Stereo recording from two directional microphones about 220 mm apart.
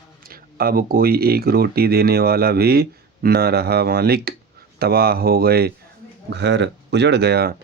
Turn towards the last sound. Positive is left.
turn(degrees=-45)  # may be behind; listen again after turning